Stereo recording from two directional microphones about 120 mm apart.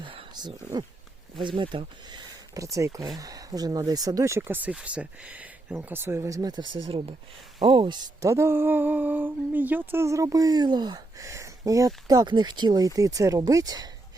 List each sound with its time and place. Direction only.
0.0 s a sound: 45° right (ahead or behind)
1.4 s speech: 45° right (ahead or behind)
8.2 s speech: 25° right (ahead or behind)